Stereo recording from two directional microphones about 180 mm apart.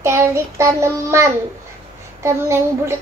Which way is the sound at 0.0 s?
15° right (ahead or behind).